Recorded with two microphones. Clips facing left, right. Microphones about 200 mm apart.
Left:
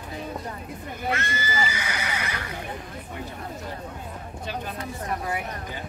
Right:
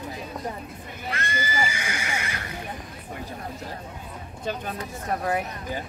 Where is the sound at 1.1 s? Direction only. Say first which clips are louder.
Even; 30° right (ahead or behind).